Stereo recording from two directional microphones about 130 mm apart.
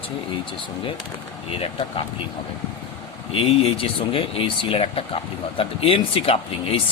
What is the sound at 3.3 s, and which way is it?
Speech, 45° left (ahead or behind).